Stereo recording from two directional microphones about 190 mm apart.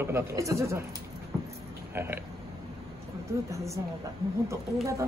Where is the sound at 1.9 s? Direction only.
10° right (ahead or behind).